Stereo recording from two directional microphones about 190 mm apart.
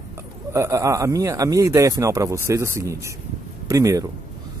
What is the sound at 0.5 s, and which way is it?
Speech, 15° right (ahead or behind).